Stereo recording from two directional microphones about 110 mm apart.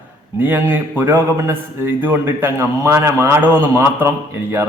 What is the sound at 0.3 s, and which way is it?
Speech, 15° right (ahead or behind).